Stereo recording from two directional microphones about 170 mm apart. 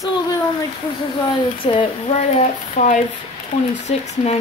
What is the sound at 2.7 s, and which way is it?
Speech, 45° left (ahead or behind).